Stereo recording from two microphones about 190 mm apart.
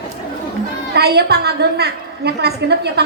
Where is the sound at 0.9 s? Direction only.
60° right (ahead or behind).